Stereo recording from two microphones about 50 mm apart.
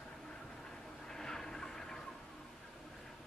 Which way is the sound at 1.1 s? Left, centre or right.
Centre.